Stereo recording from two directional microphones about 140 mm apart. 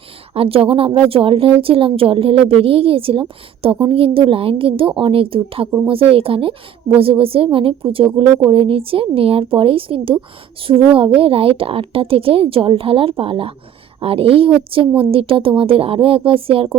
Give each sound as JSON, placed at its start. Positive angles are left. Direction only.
{"t": 0.3, "sound": "a woman's voice", "side_deg": -40}